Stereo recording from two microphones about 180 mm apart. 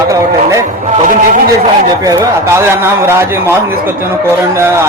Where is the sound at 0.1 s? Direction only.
15° right (ahead or behind).